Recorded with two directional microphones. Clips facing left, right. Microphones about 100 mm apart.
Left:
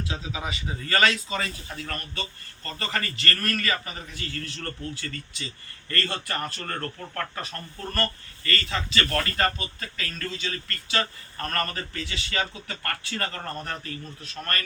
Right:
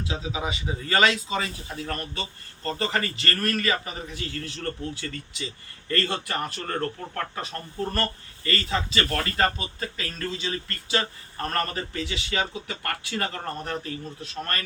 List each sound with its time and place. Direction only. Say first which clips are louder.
0.0 s a man's voice: right 3 dB; 20° right (ahead or behind)